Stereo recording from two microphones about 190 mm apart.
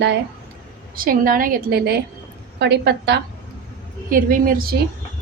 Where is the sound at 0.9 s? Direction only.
45° right (ahead or behind).